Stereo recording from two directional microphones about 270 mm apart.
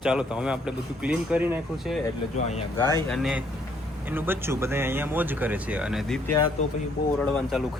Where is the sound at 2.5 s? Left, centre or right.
Centre.